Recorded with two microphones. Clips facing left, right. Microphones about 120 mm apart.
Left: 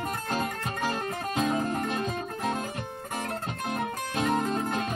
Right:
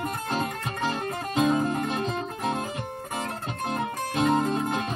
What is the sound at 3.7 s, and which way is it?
Music, 25° right (ahead or behind).